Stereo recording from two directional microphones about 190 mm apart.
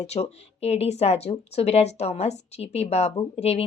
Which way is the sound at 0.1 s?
35° left (ahead or behind).